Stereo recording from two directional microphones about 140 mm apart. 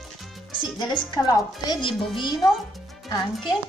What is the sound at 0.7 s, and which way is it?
Child singing, 30° left (ahead or behind).